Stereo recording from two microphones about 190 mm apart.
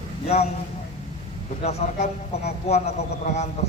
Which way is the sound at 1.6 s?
35° left (ahead or behind).